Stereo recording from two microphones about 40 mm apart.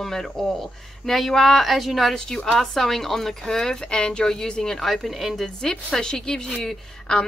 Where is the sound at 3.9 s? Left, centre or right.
Left.